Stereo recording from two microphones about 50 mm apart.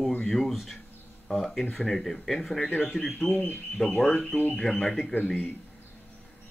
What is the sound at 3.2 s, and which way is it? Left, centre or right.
Speech, centre.